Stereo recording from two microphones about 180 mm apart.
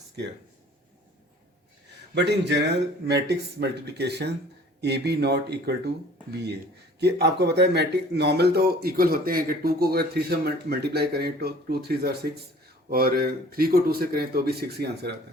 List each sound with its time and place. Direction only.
2.1 s speech: 70° right (ahead or behind)
7.0 s speech: 65° right (ahead or behind)